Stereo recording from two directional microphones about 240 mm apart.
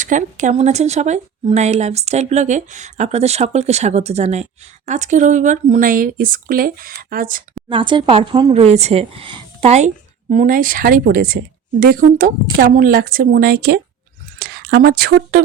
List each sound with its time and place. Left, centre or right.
0.0 s speech: right
7.7 s speech: centre; by 15.4 s right